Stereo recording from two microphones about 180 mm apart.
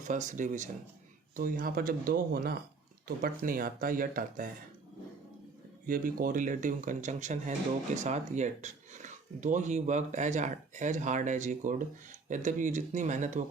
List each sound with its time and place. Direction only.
0.0 s speech: 45° right (ahead or behind)
5.8 s speech: 50° right (ahead or behind)